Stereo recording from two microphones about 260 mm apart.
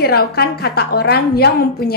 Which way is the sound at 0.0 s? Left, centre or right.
Left.